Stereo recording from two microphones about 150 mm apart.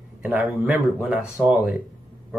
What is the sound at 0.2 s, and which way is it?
Speech, 15° right (ahead or behind).